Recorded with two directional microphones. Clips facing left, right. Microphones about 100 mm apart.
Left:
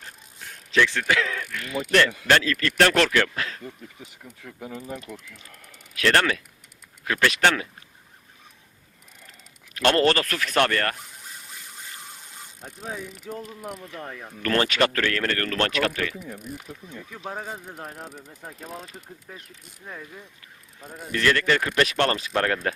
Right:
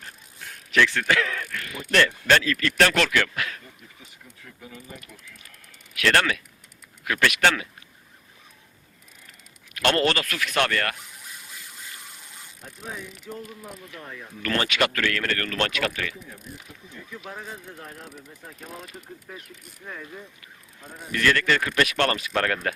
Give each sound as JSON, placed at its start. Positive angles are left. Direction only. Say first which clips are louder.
{"t": 0.7, "sound": "speech", "louder": "even", "side_deg": 20}
{"t": 2.4, "sound": "speech", "louder": "left 1 dB", "side_deg": 30}
{"t": 4.4, "sound": "speech", "louder": "left 6 dB", "side_deg": 55}
{"t": 5.9, "sound": "speech", "louder": "left 1 dB", "side_deg": 25}
{"t": 9.7, "sound": "a man's voice", "louder": "left 2 dB", "side_deg": 30}
{"t": 14.0, "sound": "speech", "louder": "left 3 dB", "side_deg": 50}
{"t": 14.4, "sound": "a man's voice", "louder": "left 2 dB", "side_deg": 35}
{"t": 17.2, "sound": "a man's voice", "louder": "left 4 dB", "side_deg": 35}
{"t": 21.1, "sound": "speech", "louder": "left 1 dB", "side_deg": 25}